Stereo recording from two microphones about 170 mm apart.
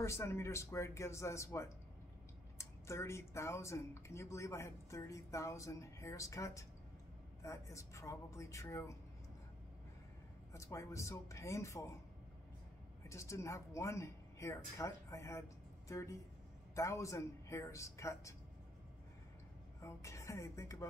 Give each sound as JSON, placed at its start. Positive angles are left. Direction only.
{"t": 0.0, "sound": "speech", "side_deg": 15}
{"t": 10.5, "sound": "speech", "side_deg": 15}
{"t": 13.1, "sound": "speech", "side_deg": 15}
{"t": 19.8, "sound": "speech", "side_deg": 15}